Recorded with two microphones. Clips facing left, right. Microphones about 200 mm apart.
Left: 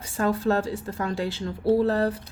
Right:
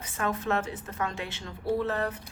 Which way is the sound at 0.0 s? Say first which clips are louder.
Left 7 dB; 30° left (ahead or behind).